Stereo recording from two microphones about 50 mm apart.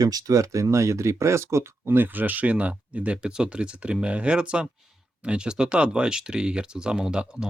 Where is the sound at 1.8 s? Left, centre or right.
Right.